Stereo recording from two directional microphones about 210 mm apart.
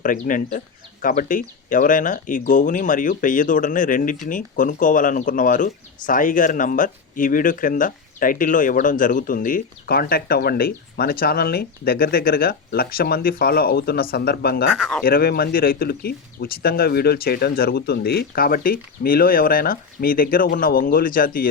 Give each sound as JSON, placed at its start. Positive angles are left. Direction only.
{"t": 0.0, "sound": "speech", "side_deg": 40}
{"t": 14.8, "sound": "speech", "side_deg": 0}
{"t": 15.0, "sound": "speech", "side_deg": 45}